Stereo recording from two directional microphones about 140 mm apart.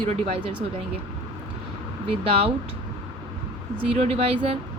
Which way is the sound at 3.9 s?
45° right (ahead or behind).